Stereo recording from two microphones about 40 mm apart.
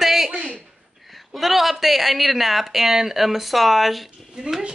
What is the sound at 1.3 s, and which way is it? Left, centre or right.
Speech, centre.